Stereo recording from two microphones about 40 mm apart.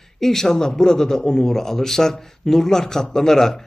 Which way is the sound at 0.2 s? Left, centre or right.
Centre.